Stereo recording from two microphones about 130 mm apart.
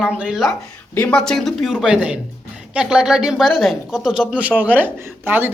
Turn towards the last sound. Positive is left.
turn(degrees=-15)  # may be behind; listen again after turning